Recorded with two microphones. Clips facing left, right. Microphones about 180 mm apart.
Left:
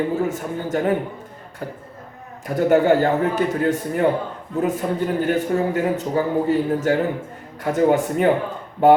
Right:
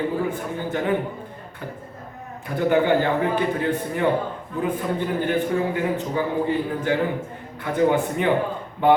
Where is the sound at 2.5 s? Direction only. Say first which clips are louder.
Left 3 dB; 45° left (ahead or behind).